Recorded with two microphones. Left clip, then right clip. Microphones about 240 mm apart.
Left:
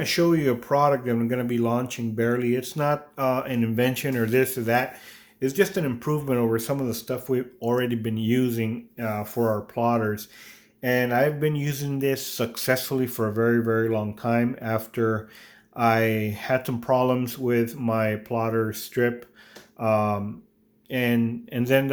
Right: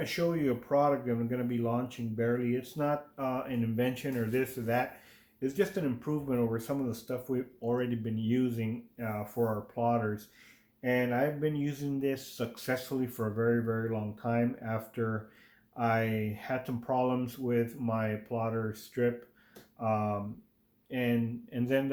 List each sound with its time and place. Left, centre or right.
0.0 s speech: left